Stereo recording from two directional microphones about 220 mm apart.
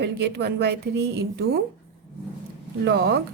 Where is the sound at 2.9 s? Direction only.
50° right (ahead or behind).